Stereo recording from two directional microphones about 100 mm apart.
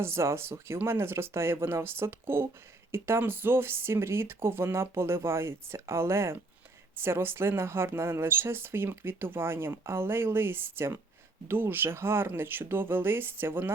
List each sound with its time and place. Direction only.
0.0 s a woman's voice: 25° right (ahead or behind)